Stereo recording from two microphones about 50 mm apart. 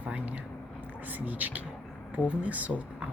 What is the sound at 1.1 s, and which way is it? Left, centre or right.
Speech, right.